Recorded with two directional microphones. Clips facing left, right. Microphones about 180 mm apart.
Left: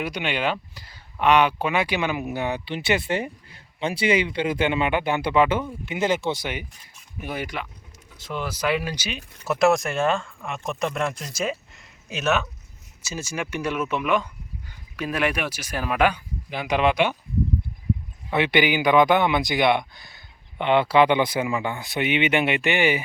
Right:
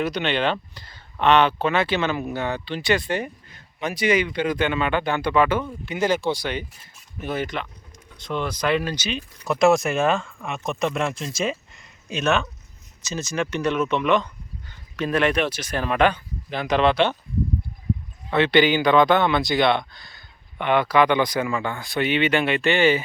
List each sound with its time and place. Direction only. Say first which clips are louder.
0.0 s speech: right 3 dB; 10° left (ahead or behind)
12.1 s speech: right 2 dB; 5° left (ahead or behind)
18.3 s speech: right 3 dB; 15° left (ahead or behind)